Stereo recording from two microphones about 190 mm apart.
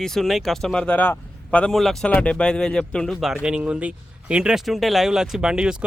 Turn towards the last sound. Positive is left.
turn(degrees=-5)  # may be behind; listen again after turning